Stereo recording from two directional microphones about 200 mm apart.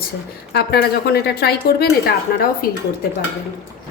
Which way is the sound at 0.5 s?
50° left (ahead or behind).